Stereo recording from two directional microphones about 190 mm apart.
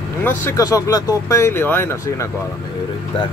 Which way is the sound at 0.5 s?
15° left (ahead or behind).